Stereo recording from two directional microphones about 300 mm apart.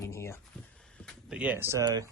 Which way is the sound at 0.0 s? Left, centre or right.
Centre.